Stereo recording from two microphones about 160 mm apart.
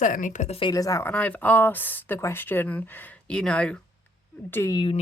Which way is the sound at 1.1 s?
10° left (ahead or behind).